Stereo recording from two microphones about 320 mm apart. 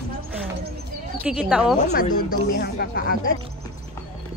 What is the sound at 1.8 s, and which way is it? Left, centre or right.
Speech, left.